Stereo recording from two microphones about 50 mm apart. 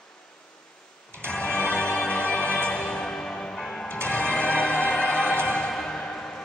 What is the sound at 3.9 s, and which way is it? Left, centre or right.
Music, left.